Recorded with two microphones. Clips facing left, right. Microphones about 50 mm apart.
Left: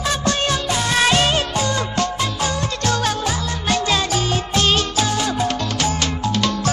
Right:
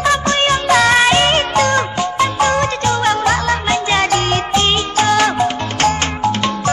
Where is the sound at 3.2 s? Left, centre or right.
Right.